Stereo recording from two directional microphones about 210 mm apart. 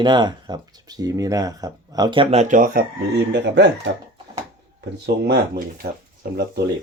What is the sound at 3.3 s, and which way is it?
Speech, 55° right (ahead or behind).